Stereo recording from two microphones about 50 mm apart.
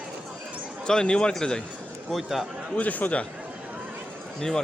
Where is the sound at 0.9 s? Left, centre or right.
Centre.